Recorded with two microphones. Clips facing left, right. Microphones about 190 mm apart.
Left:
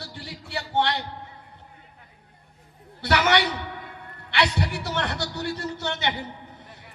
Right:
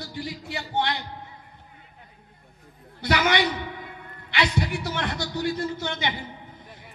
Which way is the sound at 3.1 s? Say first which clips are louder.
Left 2 dB; 70° left (ahead or behind).